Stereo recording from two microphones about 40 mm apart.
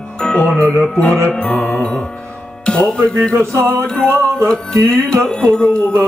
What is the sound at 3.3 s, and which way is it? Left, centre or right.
Music, right.